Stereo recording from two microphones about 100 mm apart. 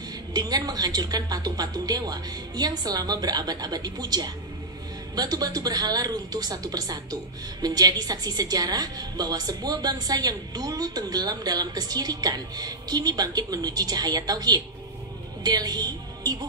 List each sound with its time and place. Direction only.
0.3 s a woman's voice: 40° right (ahead or behind)